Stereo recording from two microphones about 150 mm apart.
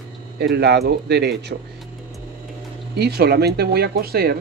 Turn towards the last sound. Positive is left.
turn(degrees=-90)